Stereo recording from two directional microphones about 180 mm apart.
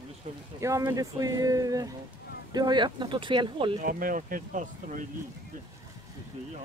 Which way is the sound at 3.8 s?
50° right (ahead or behind).